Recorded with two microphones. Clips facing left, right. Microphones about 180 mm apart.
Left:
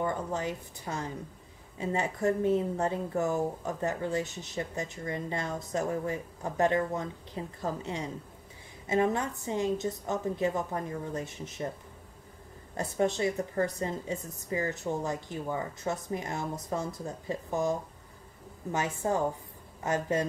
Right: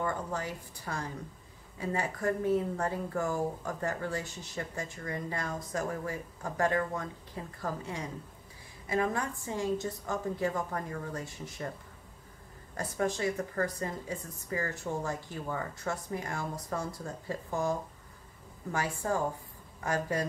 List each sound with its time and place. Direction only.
0.0 s speech: 20° left (ahead or behind)
12.7 s speech: 25° left (ahead or behind)